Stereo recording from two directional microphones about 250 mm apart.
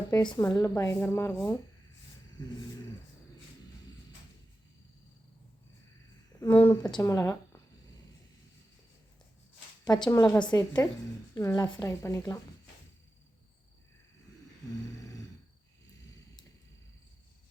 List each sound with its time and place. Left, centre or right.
0.1 s a woman's voice: centre
6.4 s a woman's voice: centre
9.9 s a woman's voice: centre